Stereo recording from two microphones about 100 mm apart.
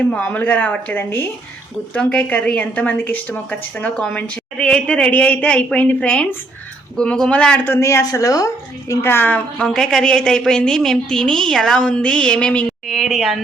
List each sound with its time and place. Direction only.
0.0 s a woman's voice: 15° left (ahead or behind)
7.8 s speech: 30° left (ahead or behind)
8.9 s a woman's voice: 25° left (ahead or behind)
12.9 s speech: centre (ahead or behind)